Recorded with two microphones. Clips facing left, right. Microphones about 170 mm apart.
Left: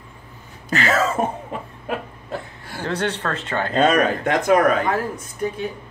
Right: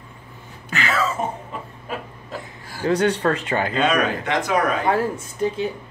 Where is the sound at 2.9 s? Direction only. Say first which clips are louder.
Right 6 dB; 10° right (ahead or behind).